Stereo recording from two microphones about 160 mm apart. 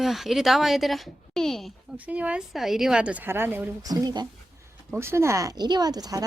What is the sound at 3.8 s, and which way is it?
Speech, 25° right (ahead or behind).